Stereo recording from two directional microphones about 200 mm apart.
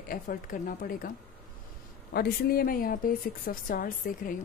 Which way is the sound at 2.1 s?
50° left (ahead or behind).